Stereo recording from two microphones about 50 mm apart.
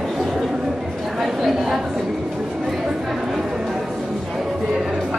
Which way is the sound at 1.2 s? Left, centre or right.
Centre.